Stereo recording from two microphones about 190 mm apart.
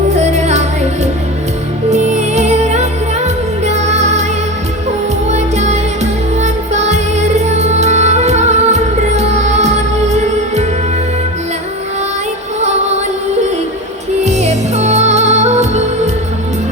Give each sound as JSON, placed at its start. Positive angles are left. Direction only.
{"t": 0.2, "sound": "music", "side_deg": -35}
{"t": 1.9, "sound": "music", "side_deg": -35}
{"t": 5.3, "sound": "music", "side_deg": -35}
{"t": 14.3, "sound": "music", "side_deg": -35}